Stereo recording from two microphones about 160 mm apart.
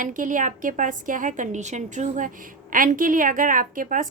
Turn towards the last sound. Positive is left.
turn(degrees=-60)  # may be behind; listen again after turning